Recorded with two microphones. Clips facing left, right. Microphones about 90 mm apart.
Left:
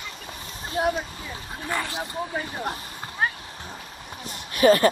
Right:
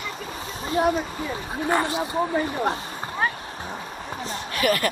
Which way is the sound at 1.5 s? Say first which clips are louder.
Right 6 dB; 30° right (ahead or behind).